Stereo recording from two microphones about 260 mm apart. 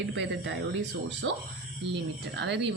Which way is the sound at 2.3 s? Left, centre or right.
Right.